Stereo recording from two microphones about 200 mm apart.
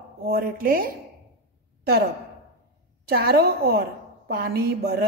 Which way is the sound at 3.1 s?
55° right (ahead or behind).